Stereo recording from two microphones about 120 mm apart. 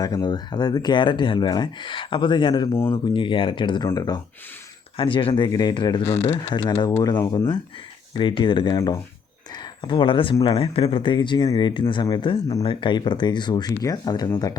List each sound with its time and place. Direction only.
0.0 s speech: 35° left (ahead or behind)
4.9 s speech: 45° left (ahead or behind); by 7.4 s 25° left (ahead or behind)
8.1 s speech: 45° left (ahead or behind)
9.8 s speech: 40° left (ahead or behind)